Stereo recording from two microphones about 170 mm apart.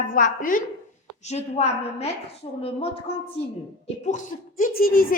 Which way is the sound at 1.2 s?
40° left (ahead or behind).